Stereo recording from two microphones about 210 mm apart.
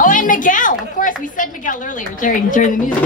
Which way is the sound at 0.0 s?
40° left (ahead or behind).